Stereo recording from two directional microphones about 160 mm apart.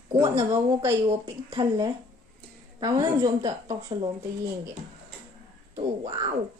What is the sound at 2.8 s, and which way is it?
Speech, 20° right (ahead or behind).